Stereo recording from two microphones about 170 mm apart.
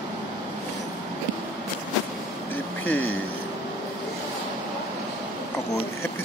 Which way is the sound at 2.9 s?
10° left (ahead or behind).